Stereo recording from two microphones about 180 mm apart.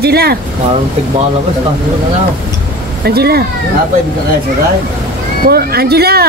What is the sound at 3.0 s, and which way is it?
Speech, 60° right (ahead or behind).